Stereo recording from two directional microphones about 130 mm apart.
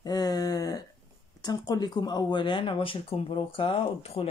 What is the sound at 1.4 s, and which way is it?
Speech, 30° left (ahead or behind).